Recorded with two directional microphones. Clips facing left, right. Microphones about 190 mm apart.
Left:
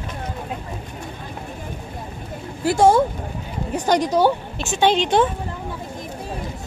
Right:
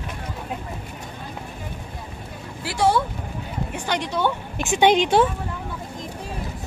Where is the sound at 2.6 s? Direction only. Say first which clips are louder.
Left 6 dB; 45° left (ahead or behind).